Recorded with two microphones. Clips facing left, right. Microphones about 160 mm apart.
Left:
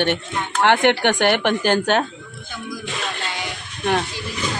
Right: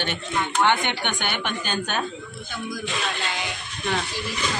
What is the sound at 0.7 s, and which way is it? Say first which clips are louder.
A woman's voice: left 7 dB; 80° left.